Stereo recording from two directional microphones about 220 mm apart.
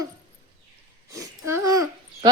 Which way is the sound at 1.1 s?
15° right (ahead or behind).